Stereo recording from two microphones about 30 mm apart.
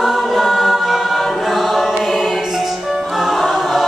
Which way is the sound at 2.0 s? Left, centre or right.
Centre.